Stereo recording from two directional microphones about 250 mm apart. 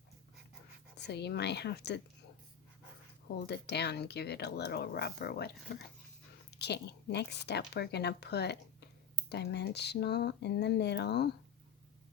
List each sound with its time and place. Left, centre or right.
1.0 s speech: left
3.3 s speech: left